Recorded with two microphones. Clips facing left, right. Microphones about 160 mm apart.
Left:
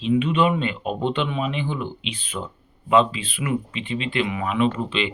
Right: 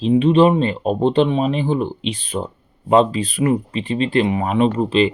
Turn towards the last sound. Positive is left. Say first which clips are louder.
# right 6 dB
turn(degrees=-40)  # may be behind; listen again after turning